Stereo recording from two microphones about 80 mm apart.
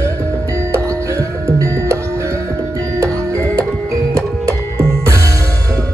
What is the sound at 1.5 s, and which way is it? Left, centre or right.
Music, right.